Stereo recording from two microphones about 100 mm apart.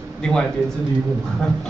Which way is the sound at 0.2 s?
5° left (ahead or behind).